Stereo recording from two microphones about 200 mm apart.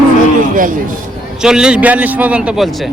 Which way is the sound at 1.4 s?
5° right (ahead or behind).